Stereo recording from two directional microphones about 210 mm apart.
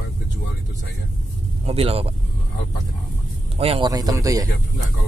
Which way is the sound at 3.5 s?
25° right (ahead or behind).